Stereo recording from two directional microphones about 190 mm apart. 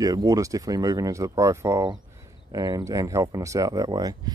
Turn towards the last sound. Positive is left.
turn(degrees=-20)  # may be behind; listen again after turning